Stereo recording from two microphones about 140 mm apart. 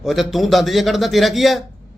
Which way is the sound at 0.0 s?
Centre (ahead or behind).